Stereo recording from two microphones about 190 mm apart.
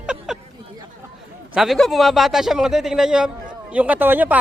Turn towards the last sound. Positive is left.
turn(degrees=-10)  # may be behind; listen again after turning